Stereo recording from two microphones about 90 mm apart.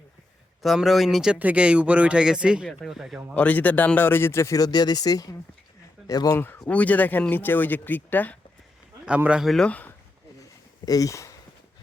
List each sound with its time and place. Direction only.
0.6 s speech: centre (ahead or behind)
1.4 s speech: 15° right (ahead or behind)
3.3 s speech: 15° left (ahead or behind); by 6.4 s 45° left (ahead or behind)
6.7 s speech: 15° left (ahead or behind)
9.0 s speech: 15° right (ahead or behind)
9.4 s speech: centre (ahead or behind)
9.6 s speech: 15° left (ahead or behind)
10.8 s speech: 40° left (ahead or behind)